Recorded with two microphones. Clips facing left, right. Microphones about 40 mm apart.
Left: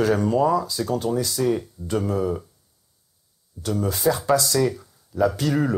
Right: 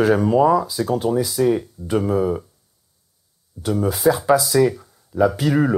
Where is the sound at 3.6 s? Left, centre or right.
Centre.